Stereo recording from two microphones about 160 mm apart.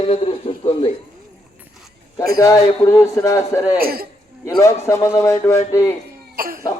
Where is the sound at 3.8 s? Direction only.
70° right (ahead or behind).